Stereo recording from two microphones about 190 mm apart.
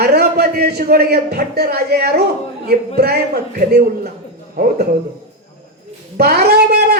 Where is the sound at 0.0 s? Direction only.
55° right (ahead or behind).